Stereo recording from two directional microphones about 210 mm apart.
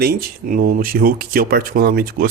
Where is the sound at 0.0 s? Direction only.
45° right (ahead or behind).